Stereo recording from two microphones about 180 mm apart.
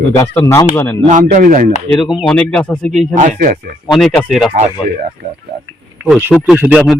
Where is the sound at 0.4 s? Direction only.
20° left (ahead or behind).